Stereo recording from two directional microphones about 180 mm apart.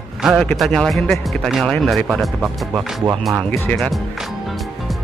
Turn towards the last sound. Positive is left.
turn(degrees=5)  # may be behind; listen again after turning